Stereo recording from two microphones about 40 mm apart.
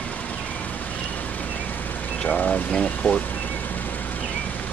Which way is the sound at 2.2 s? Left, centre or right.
Left.